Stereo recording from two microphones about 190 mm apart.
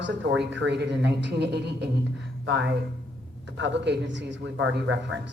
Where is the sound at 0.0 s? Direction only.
70° right (ahead or behind).